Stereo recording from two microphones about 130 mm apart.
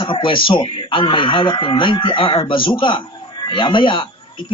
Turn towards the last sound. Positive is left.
turn(degrees=40)  # may be behind; listen again after turning